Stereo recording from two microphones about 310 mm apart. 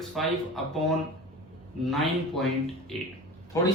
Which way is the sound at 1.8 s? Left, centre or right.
Centre.